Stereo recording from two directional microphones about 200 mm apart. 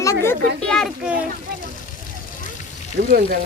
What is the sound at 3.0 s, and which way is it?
Speech, 45° right (ahead or behind).